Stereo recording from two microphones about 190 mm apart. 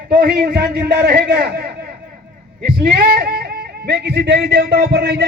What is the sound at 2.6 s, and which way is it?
A man's voice, 55° right (ahead or behind).